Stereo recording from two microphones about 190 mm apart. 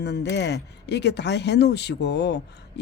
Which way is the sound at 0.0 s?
60° left (ahead or behind).